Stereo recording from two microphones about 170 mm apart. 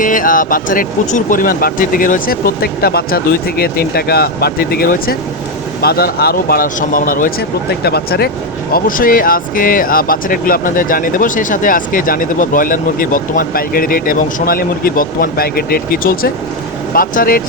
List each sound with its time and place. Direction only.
0.0 s speech: 50° left (ahead or behind)
7.9 s speech: 70° left (ahead or behind)
8.7 s speech: 55° left (ahead or behind)